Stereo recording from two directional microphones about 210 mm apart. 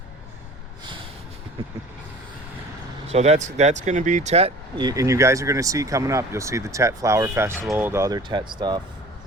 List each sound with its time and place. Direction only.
3.1 s speech: 30° right (ahead or behind)